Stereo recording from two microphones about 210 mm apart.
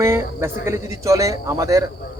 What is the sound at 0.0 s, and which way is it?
Speech, 15° right (ahead or behind).